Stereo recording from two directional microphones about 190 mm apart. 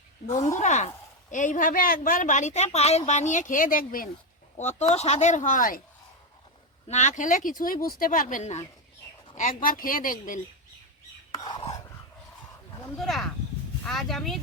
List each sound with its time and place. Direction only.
0.3 s speech: 15° left (ahead or behind)
0.6 s a woman's voice: 40° left (ahead or behind)
4.5 s a woman's voice: 35° left (ahead or behind)
6.8 s speech: 35° left (ahead or behind)
11.5 s dog: 20° left (ahead or behind)
13.0 s speech: centre (ahead or behind)